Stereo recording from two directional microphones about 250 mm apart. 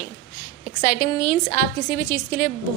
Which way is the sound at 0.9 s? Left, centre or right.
Left.